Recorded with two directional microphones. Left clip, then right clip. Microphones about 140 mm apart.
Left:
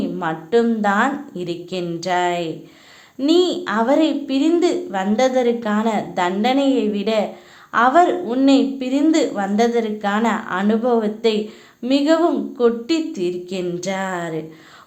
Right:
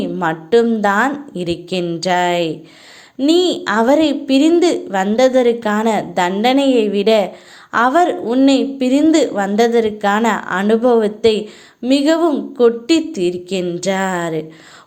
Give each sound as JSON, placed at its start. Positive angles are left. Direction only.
{"t": 0.0, "sound": "a woman's voice", "side_deg": -40}